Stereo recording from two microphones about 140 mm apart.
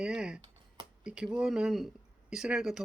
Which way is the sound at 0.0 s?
5° right (ahead or behind).